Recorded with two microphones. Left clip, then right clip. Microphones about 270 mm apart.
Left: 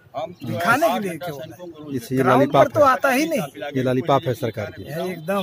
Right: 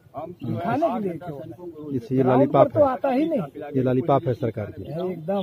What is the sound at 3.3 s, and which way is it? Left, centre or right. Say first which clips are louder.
Speech: left 2 dB; left.